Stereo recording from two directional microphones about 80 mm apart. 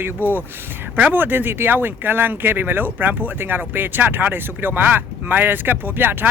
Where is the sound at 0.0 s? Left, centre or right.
Right.